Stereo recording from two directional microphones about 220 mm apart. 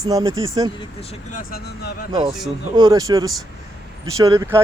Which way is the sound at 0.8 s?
25° left (ahead or behind).